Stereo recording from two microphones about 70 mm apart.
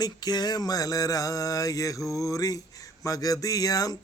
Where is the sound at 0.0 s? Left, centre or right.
Left.